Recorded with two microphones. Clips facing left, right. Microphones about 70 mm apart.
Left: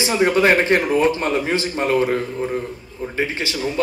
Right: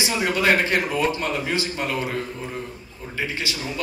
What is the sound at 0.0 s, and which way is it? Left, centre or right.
Speech, left.